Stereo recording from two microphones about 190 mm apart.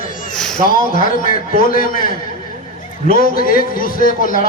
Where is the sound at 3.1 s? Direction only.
50° left (ahead or behind).